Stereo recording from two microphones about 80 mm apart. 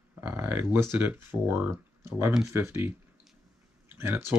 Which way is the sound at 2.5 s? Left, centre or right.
Right.